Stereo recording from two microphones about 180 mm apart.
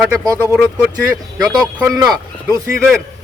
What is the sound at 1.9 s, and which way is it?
Speech, 20° right (ahead or behind).